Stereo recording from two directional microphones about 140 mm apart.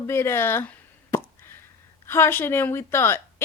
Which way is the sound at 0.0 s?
15° left (ahead or behind).